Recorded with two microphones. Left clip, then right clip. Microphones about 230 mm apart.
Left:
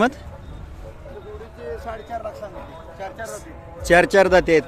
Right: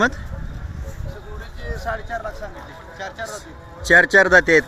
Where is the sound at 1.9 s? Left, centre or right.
Centre.